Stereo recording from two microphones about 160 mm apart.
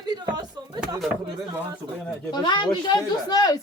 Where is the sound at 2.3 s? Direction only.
25° left (ahead or behind).